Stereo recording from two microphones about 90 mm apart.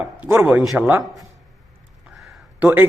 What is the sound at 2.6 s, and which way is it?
Speech, 20° right (ahead or behind).